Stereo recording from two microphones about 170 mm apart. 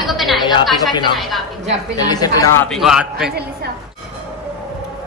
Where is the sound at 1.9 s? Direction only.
25° left (ahead or behind).